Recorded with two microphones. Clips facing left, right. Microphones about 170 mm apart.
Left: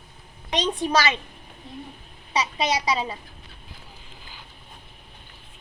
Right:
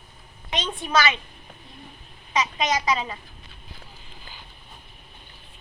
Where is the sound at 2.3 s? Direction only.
30° left (ahead or behind).